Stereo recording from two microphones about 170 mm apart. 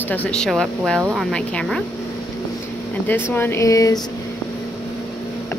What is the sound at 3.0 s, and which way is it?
Speech, 10° left (ahead or behind).